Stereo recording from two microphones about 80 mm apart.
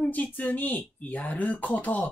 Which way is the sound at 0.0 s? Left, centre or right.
Centre.